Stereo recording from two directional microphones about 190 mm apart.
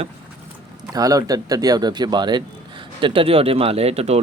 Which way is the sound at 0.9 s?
20° right (ahead or behind).